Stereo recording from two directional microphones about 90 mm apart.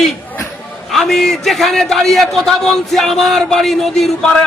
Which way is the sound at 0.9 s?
Centre (ahead or behind).